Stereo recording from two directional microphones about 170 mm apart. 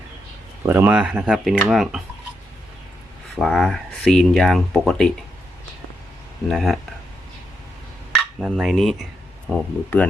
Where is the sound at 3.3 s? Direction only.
5° left (ahead or behind).